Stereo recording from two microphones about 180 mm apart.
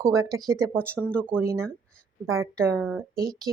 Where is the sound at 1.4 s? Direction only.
15° right (ahead or behind).